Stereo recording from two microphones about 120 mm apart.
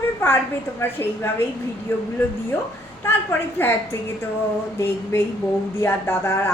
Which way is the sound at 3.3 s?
20° left (ahead or behind).